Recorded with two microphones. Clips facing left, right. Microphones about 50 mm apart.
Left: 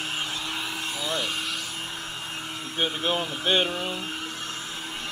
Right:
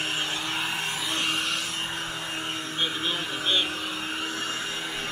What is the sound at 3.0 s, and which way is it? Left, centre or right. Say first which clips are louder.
Speech: left 3 dB; left.